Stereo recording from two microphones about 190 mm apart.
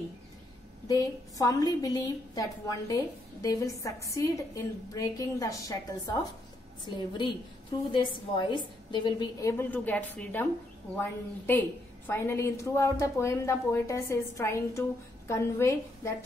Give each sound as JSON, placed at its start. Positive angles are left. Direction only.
{"t": 0.8, "sound": "a woman's voice", "side_deg": 20}
{"t": 7.9, "sound": "a woman's voice", "side_deg": 25}